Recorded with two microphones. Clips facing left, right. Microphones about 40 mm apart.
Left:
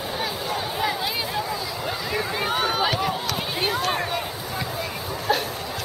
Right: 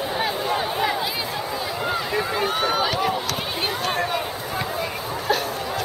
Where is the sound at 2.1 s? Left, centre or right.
Centre.